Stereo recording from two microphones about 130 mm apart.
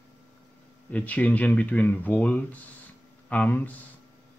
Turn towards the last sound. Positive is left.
turn(degrees=10)  # may be behind; listen again after turning